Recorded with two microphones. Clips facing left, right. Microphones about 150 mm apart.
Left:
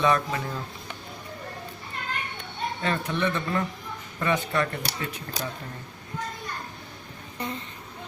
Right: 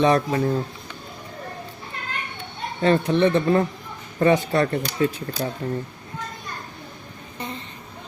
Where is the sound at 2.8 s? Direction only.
30° right (ahead or behind).